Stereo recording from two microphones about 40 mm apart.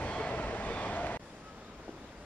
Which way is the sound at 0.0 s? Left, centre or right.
Left.